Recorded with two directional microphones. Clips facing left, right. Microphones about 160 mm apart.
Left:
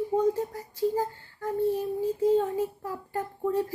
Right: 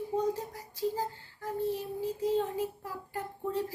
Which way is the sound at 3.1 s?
50° left (ahead or behind).